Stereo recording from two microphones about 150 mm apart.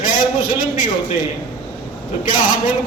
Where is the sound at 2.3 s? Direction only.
65° left (ahead or behind).